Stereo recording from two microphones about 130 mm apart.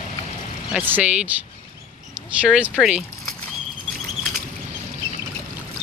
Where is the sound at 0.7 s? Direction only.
15° right (ahead or behind).